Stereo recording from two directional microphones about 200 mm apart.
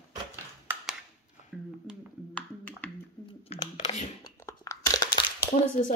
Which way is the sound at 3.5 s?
35° left (ahead or behind).